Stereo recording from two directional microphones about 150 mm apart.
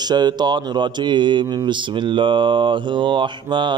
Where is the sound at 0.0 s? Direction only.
30° right (ahead or behind).